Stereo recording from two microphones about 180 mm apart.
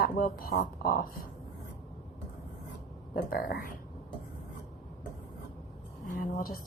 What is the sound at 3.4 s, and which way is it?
Speech, 65° left (ahead or behind).